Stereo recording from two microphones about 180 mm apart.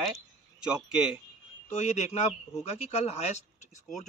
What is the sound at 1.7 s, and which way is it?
Speech, 35° left (ahead or behind).